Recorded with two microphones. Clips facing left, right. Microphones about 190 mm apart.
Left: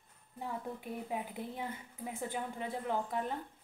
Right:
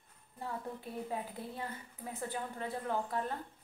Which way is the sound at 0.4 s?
15° left (ahead or behind).